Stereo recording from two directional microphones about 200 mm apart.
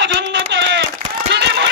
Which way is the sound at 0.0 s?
60° right (ahead or behind).